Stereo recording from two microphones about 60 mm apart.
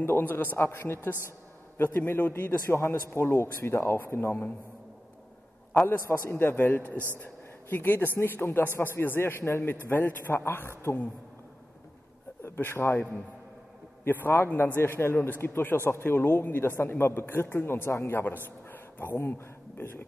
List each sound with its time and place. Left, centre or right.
0.0 s a man's voice: left
6.0 s a man's voice: left
12.4 s a man's voice: left
14.0 s a man's voice: left